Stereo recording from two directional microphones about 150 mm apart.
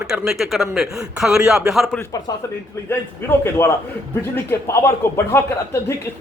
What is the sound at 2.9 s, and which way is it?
Speech, 15° left (ahead or behind).